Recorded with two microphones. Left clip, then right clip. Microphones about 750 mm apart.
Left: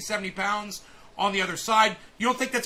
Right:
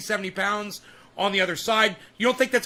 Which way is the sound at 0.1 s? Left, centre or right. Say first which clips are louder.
Right 2 dB; right.